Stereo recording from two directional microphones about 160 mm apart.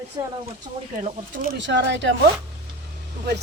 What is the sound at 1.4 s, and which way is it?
Speech, 90° right.